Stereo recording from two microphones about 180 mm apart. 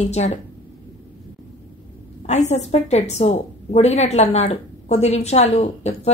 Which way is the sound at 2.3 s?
40° left (ahead or behind).